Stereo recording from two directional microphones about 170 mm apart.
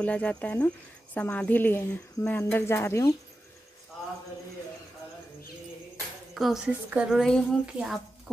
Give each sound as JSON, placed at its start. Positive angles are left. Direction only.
{"t": 0.0, "sound": "speech", "side_deg": 5}
{"t": 6.3, "sound": "a woman's voice", "side_deg": 0}